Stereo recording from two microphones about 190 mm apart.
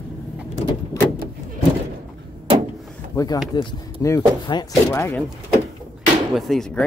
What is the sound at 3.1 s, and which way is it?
Speech, 20° left (ahead or behind).